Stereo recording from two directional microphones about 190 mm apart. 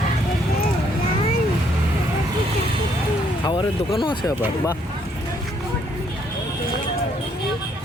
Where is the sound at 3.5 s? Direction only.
25° left (ahead or behind).